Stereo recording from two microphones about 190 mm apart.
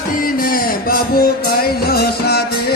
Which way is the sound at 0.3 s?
50° left (ahead or behind).